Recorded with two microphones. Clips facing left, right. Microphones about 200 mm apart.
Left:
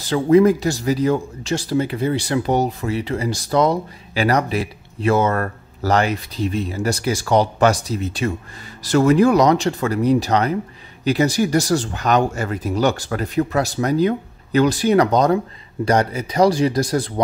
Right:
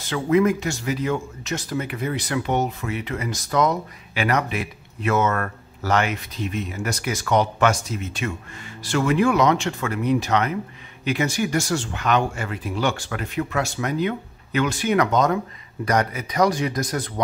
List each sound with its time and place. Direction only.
0.0 s speech: 35° left (ahead or behind)